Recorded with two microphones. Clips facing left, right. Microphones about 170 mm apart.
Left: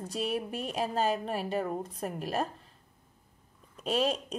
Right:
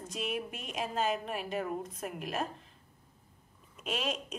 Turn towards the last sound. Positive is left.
turn(degrees=35)  # may be behind; listen again after turning